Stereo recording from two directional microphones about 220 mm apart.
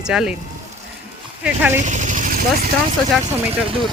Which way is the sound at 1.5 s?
5° right (ahead or behind).